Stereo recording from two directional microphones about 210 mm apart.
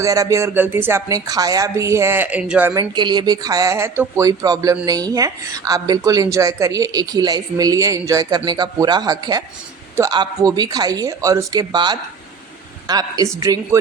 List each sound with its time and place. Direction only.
0.0 s speech: 15° right (ahead or behind)